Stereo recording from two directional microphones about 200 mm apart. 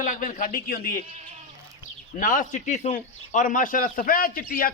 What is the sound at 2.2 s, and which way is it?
A man's voice, 40° left (ahead or behind).